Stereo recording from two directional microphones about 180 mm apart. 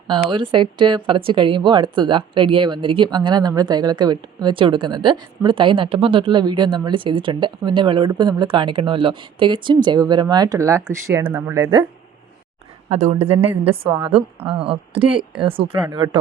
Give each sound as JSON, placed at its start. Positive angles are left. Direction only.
{"t": 0.3, "sound": "speech", "side_deg": -25}
{"t": 12.9, "sound": "a woman's voice", "side_deg": -40}